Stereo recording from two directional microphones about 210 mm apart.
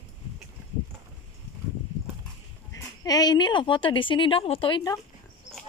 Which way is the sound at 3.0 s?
20° left (ahead or behind).